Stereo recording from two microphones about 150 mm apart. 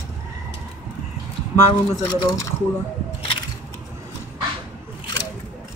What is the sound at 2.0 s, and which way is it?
Speech, 25° left (ahead or behind).